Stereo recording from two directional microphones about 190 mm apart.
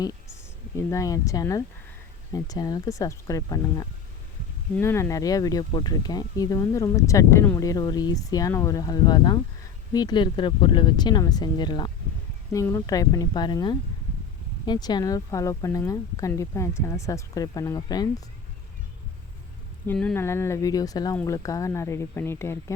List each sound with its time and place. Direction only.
0.8 s speech: 15° left (ahead or behind)
19.9 s speech: 5° left (ahead or behind)